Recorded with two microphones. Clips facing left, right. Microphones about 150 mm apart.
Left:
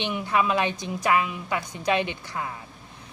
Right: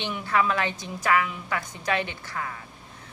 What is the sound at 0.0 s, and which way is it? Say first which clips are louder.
A woman's voice: left 1 dB; 15° left (ahead or behind).